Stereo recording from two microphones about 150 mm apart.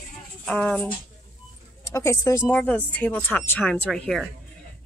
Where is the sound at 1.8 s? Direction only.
20° left (ahead or behind).